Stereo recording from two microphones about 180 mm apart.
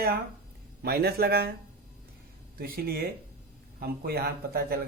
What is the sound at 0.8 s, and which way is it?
Speech, 60° right (ahead or behind).